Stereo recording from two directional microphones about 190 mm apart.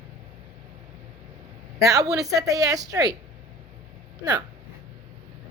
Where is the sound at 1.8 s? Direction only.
20° right (ahead or behind).